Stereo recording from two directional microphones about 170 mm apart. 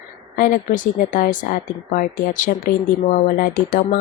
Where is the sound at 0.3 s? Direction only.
50° left (ahead or behind).